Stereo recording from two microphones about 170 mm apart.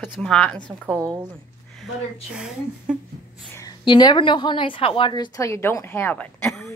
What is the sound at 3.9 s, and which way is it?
A woman's voice, 25° left (ahead or behind).